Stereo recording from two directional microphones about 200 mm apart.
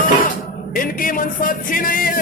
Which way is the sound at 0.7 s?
45° left (ahead or behind).